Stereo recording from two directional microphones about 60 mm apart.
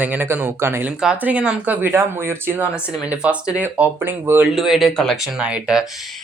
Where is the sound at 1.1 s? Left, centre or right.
Right.